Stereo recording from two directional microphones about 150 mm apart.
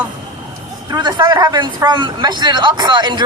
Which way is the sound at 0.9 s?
30° right (ahead or behind).